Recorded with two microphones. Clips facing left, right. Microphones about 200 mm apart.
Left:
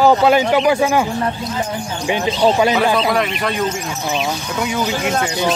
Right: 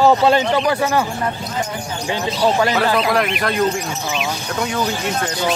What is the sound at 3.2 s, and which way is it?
Speech, centre (ahead or behind).